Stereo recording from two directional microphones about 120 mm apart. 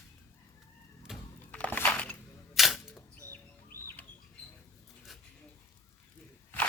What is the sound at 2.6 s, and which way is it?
Camera, centre (ahead or behind).